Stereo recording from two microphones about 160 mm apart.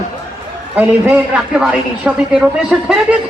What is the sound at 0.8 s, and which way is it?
A man's voice, 10° right (ahead or behind).